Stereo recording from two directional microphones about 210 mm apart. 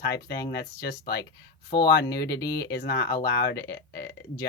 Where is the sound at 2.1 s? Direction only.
50° left (ahead or behind).